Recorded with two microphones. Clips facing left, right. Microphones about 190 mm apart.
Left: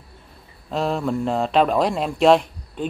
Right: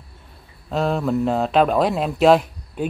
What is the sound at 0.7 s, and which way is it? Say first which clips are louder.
Speech: right 2 dB; centre (ahead or behind).